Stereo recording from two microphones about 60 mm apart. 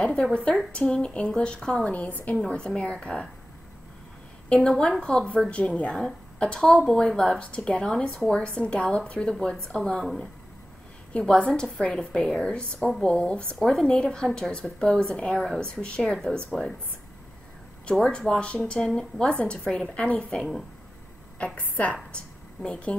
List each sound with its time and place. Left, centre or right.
0.0 s a woman's voice: centre
2.4 s a woman's voice: centre
4.6 s a woman's voice: centre
5.5 s a woman's voice: centre
11.1 s a woman's voice: centre
13.6 s a woman's voice: centre
17.8 s a woman's voice: centre
20.3 s a woman's voice: centre
21.5 s speech: left
22.1 s a sound: centre